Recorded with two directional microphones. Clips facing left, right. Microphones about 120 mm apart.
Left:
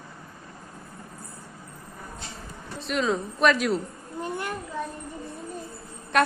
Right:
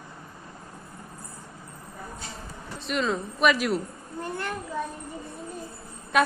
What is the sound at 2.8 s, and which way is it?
Speech, centre (ahead or behind).